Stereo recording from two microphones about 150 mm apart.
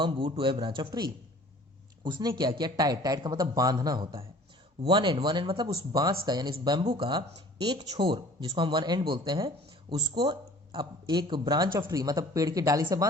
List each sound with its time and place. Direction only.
0.0 s speech: 35° right (ahead or behind)
2.0 s speech: 30° right (ahead or behind)
5.7 s speech: 25° right (ahead or behind)